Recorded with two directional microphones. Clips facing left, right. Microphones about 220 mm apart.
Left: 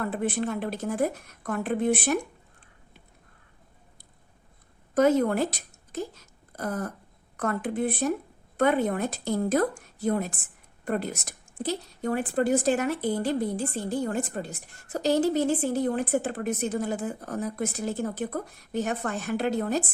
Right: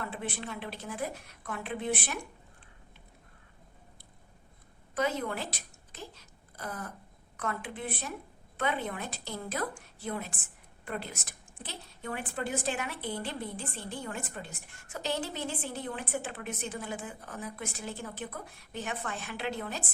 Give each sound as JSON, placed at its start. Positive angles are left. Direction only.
{"t": 0.0, "sound": "a woman's voice", "side_deg": 45}
{"t": 4.9, "sound": "a woman's voice", "side_deg": 45}